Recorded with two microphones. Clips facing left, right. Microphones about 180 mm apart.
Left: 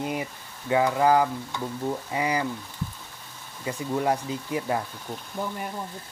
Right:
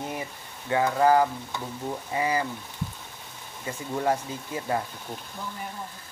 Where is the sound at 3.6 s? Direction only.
20° left (ahead or behind).